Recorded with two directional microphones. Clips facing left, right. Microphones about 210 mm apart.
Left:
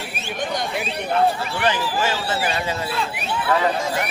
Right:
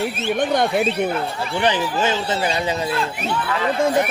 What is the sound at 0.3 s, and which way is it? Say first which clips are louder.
Speech: right 6 dB; 55° right (ahead or behind).